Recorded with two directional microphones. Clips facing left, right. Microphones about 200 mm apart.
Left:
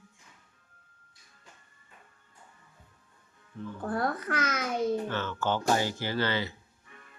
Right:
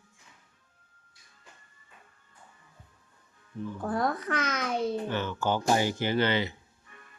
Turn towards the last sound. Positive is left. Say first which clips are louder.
# right 4 dB
turn(degrees=-20)  # may be behind; listen again after turning